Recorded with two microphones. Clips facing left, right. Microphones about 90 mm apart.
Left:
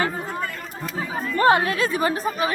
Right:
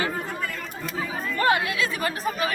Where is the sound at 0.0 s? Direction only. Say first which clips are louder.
Left 3 dB; 30° left (ahead or behind).